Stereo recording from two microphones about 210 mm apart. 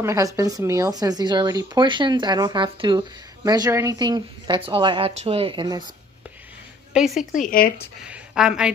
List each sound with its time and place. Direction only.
0.0 s speech: 15° right (ahead or behind)
6.9 s a woman's voice: centre (ahead or behind)
7.3 s speech: 40° left (ahead or behind)
8.0 s a woman's voice: 5° right (ahead or behind)